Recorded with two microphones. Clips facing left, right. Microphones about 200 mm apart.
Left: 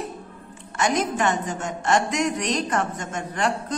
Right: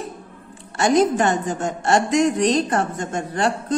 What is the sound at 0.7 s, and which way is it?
A woman's voice, 35° right (ahead or behind).